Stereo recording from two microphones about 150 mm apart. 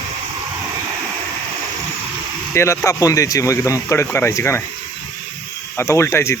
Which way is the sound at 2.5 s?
15° left (ahead or behind).